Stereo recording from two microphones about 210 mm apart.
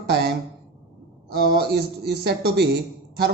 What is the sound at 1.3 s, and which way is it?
A man's voice, 50° right (ahead or behind).